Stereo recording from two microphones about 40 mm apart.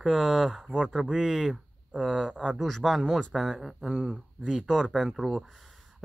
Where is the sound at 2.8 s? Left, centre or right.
Centre.